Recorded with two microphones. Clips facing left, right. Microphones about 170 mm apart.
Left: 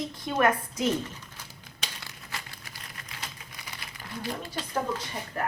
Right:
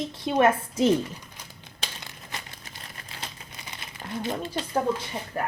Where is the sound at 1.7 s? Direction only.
20° right (ahead or behind).